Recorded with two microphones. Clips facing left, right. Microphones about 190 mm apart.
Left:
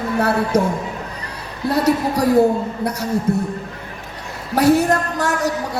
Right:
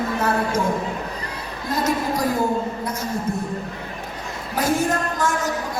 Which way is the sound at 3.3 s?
70° left (ahead or behind).